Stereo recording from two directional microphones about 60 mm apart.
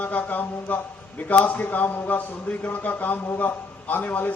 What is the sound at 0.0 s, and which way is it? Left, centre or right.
A man's voice, left.